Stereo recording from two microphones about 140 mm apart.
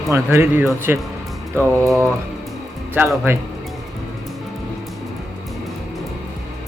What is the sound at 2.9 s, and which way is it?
Speech, 15° right (ahead or behind).